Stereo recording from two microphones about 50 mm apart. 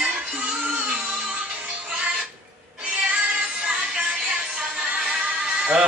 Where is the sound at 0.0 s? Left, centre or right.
Right.